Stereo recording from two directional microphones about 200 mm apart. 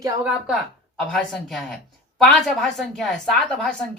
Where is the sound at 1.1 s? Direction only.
5° left (ahead or behind).